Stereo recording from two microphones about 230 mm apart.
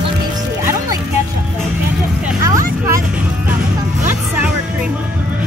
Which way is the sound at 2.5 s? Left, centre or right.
Centre.